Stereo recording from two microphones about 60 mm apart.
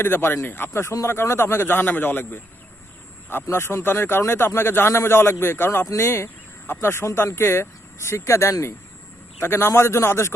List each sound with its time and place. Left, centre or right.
0.0 s a man's voice: left
3.5 s speech: left